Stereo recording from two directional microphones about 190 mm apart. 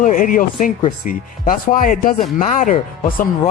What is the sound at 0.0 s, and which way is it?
Speech, 45° left (ahead or behind).